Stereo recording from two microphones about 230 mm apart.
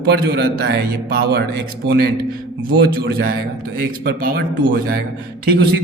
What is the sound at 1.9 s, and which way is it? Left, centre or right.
A man's voice, right.